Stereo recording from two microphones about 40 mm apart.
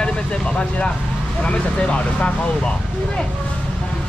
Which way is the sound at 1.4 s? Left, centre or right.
Left.